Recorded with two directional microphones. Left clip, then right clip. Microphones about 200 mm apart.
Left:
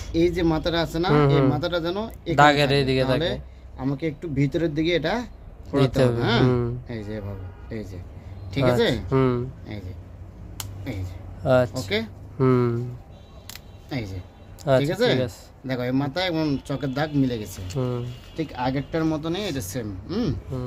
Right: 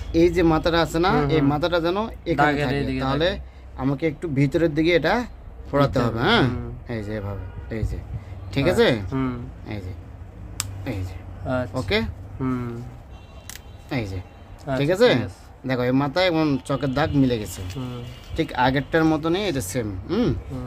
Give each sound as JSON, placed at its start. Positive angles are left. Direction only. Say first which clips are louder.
{"t": 0.1, "sound": "speech", "louder": "right 4 dB", "side_deg": -15}
{"t": 2.3, "sound": "speech", "louder": "left 4 dB", "side_deg": 55}
{"t": 3.0, "sound": "speech", "louder": "right 1 dB", "side_deg": -15}
{"t": 9.0, "sound": "speech", "louder": "left 6 dB", "side_deg": 55}
{"t": 9.6, "sound": "speech", "louder": "right 3 dB", "side_deg": -20}
{"t": 11.4, "sound": "speech", "louder": "left 7 dB", "side_deg": 55}
{"t": 11.8, "sound": "speech", "louder": "right 3 dB", "side_deg": -15}
{"t": 12.4, "sound": "speech", "louder": "left 8 dB", "side_deg": 55}
{"t": 13.9, "sound": "speech", "louder": "right 4 dB", "side_deg": -20}
{"t": 17.8, "sound": "speech", "louder": "left 8 dB", "side_deg": 50}
{"t": 18.3, "sound": "speech", "louder": "right 6 dB", "side_deg": -25}